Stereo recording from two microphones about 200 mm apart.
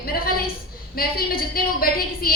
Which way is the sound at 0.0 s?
45° left (ahead or behind).